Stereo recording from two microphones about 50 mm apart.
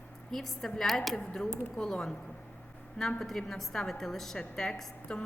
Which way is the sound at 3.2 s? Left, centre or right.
Centre.